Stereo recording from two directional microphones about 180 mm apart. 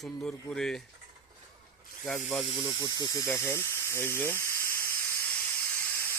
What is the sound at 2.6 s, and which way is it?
Speech, 20° left (ahead or behind).